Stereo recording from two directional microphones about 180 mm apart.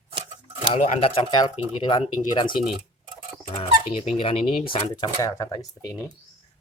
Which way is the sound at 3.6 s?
30° left (ahead or behind).